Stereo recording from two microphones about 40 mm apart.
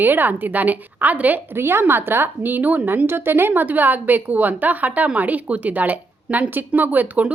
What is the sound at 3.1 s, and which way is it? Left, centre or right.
Speech, right.